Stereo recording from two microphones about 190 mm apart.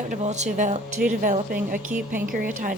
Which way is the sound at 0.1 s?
35° right (ahead or behind).